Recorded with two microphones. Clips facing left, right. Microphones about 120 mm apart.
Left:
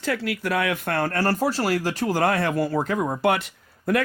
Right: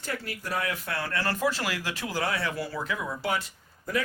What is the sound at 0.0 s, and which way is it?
Speech, 90° left.